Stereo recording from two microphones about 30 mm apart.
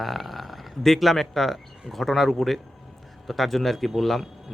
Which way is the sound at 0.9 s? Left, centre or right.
Centre.